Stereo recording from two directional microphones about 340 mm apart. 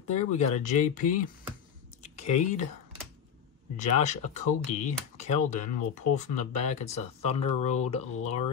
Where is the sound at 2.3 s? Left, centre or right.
Left.